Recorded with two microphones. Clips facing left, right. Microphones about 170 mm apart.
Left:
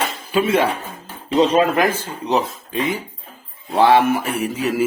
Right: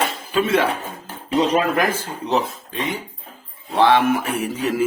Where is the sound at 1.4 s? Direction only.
25° left (ahead or behind).